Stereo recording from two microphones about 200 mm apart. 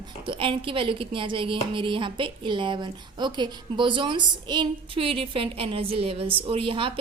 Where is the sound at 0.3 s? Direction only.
25° right (ahead or behind).